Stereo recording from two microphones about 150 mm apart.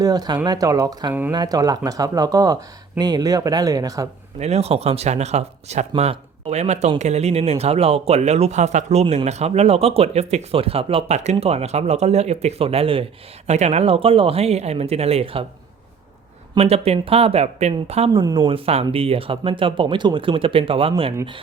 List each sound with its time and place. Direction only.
0.0 s speech: 25° right (ahead or behind)
4.4 s speech: 45° right (ahead or behind)
16.6 s speech: 45° right (ahead or behind)